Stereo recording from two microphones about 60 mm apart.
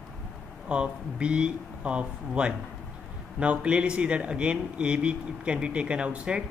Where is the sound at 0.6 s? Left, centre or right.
Centre.